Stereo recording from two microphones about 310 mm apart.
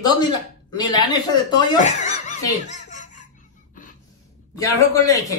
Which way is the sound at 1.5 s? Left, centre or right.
Centre.